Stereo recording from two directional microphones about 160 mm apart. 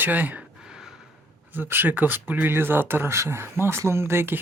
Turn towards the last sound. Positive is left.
turn(degrees=-15)  # may be behind; listen again after turning